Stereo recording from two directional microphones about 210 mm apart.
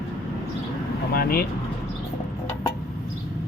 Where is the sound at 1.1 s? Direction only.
45° left (ahead or behind).